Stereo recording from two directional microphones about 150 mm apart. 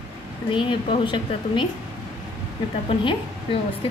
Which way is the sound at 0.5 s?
35° left (ahead or behind).